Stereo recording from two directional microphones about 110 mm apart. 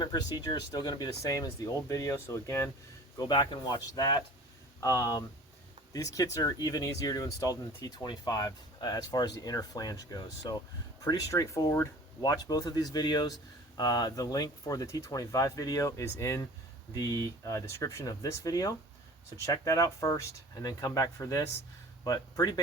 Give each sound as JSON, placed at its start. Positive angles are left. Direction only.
{"t": 0.0, "sound": "speech", "side_deg": 40}
{"t": 3.2, "sound": "speech", "side_deg": 35}